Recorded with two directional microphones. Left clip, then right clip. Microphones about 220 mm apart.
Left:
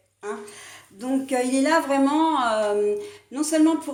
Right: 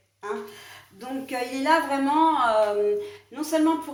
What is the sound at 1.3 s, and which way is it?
A woman's voice, 45° left (ahead or behind).